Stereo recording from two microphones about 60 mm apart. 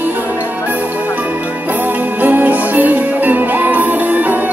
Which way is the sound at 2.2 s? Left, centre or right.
Right.